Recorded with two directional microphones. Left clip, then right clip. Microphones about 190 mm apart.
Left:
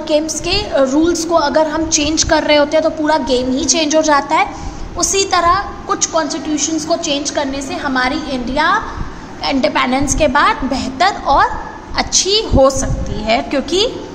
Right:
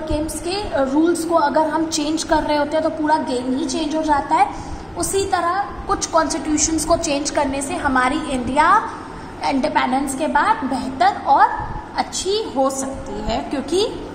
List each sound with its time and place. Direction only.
0.1 s a woman's voice: 25° left (ahead or behind)
5.9 s a woman's voice: 10° left (ahead or behind)
9.4 s a woman's voice: 15° left (ahead or behind)
12.0 s a woman's voice: 35° left (ahead or behind)